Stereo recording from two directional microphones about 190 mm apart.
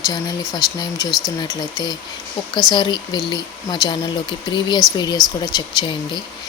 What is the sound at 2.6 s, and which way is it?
Speech, 20° left (ahead or behind).